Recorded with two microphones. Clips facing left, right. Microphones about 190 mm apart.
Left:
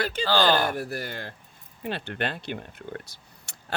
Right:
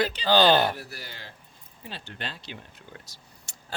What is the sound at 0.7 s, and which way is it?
Speech, 50° left (ahead or behind).